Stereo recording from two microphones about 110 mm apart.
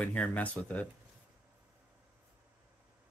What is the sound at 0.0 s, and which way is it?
Speech, 15° left (ahead or behind).